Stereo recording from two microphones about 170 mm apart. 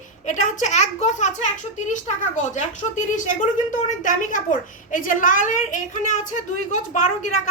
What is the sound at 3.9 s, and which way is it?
A woman's voice, 50° left (ahead or behind).